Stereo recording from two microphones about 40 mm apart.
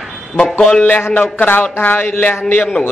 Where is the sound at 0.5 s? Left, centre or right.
Left.